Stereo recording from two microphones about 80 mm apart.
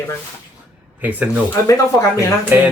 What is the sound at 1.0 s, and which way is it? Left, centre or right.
Speech, right.